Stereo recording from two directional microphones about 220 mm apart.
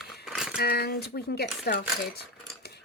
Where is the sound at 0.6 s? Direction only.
45° left (ahead or behind).